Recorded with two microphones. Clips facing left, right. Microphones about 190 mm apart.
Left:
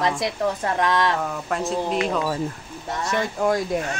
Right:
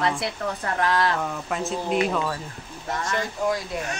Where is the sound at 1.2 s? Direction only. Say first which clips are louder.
Left 2 dB; centre (ahead or behind).